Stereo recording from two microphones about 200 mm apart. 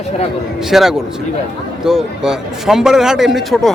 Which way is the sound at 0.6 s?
Centre (ahead or behind).